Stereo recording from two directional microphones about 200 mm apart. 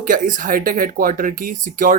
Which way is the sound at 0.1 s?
40° right (ahead or behind).